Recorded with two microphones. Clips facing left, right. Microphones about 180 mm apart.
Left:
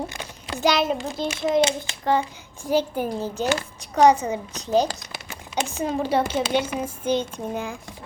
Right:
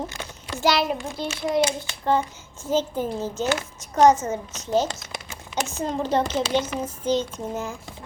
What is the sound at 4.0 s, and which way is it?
Speech, 15° left (ahead or behind).